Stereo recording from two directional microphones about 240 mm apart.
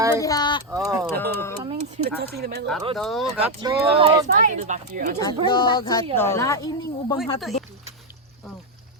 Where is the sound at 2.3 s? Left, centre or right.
Right.